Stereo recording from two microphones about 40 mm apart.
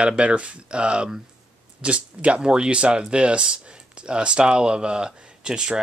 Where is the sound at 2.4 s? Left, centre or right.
Right.